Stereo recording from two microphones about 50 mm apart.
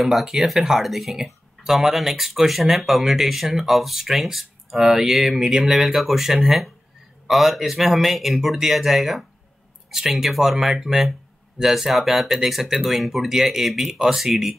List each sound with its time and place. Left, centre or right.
0.0 s speech: centre